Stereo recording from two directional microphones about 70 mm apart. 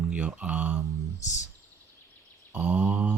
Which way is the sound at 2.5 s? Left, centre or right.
Right.